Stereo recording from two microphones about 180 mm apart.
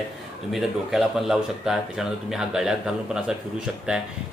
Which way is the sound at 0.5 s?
Centre (ahead or behind).